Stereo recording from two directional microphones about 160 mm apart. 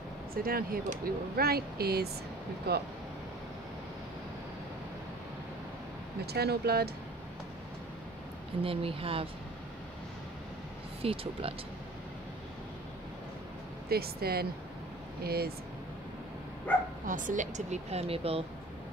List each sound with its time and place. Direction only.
0.3 s speech: 65° right (ahead or behind)
2.7 s speech: 90° right
6.2 s speech: 85° right
8.6 s speech: 35° right (ahead or behind)
11.0 s speech: 35° right (ahead or behind)
13.8 s speech: 75° right (ahead or behind)
17.0 s speech: 55° right (ahead or behind); by 18.4 s 40° right (ahead or behind)